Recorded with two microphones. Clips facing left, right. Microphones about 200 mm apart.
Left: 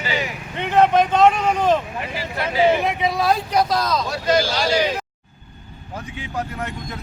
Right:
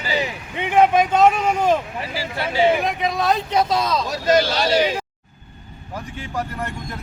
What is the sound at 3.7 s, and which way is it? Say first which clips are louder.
Speech: even; 25° right (ahead or behind).